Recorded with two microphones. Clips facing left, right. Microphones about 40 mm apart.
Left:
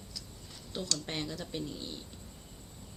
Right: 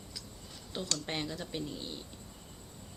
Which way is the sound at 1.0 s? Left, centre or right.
Centre.